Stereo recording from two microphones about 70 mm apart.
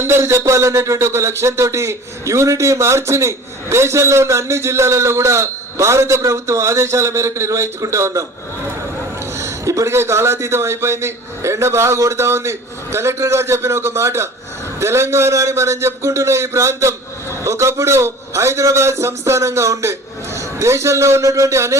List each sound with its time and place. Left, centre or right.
0.0 s speech: right
9.4 s a man's voice: right